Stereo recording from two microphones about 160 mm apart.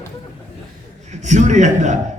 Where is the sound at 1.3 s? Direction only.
45° right (ahead or behind).